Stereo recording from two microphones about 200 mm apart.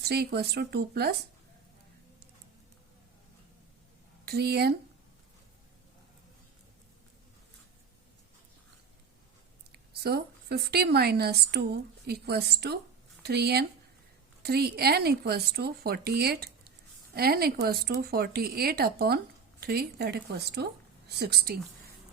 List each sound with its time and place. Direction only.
0.0 s speech: 55° right (ahead or behind)
4.3 s speech: 55° right (ahead or behind)
9.7 s speech: 50° right (ahead or behind)